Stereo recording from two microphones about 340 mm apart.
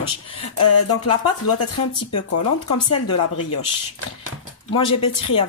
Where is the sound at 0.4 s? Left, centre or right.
Left.